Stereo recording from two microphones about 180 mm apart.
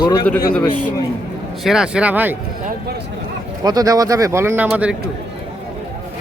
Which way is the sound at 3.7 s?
20° right (ahead or behind).